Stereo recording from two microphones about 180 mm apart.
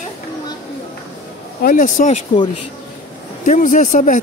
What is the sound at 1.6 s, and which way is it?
Speech, 50° left (ahead or behind).